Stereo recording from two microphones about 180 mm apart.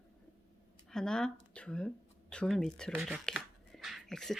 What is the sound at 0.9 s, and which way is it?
Speech, 5° left (ahead or behind).